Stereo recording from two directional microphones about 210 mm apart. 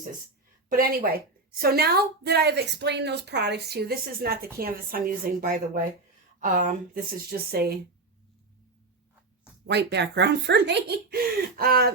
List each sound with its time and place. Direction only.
0.7 s a woman's voice: 45° right (ahead or behind)
9.6 s a woman's voice: 55° right (ahead or behind)